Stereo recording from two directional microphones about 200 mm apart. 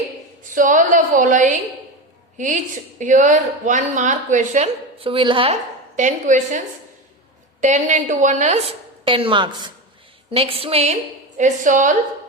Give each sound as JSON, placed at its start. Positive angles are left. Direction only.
{"t": 0.4, "sound": "a woman's voice", "side_deg": -40}
{"t": 3.0, "sound": "a woman's voice", "side_deg": -40}
{"t": 6.0, "sound": "a woman's voice", "side_deg": -40}
{"t": 7.6, "sound": "a woman's voice", "side_deg": -40}